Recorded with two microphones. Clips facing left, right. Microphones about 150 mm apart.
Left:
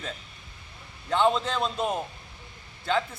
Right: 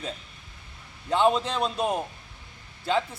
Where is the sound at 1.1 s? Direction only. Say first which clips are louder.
Right 1 dB; 10° right (ahead or behind).